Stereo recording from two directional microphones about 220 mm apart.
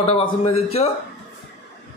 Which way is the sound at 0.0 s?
25° left (ahead or behind).